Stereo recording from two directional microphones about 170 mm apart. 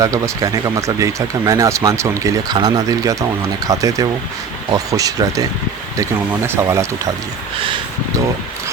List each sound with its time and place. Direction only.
0.0 s speech: 20° right (ahead or behind)